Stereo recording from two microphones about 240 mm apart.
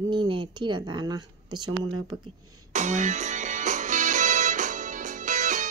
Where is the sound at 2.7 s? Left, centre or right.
Right.